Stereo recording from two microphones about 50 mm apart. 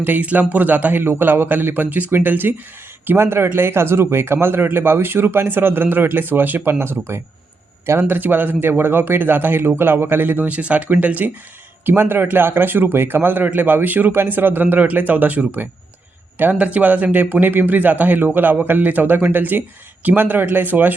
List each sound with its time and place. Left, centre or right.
0.0 s speech: right
1.0 s speech: right
3.2 s a man's voice: right
8.0 s a man's voice: right
11.9 s a man's voice: right